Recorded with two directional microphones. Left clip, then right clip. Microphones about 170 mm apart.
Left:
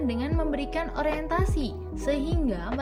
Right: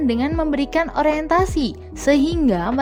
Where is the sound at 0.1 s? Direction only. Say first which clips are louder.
Right 9 dB; 55° right (ahead or behind).